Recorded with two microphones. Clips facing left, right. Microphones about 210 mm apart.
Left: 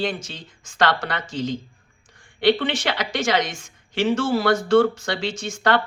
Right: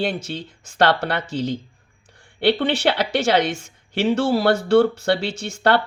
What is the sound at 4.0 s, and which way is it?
A woman's voice, 60° right (ahead or behind).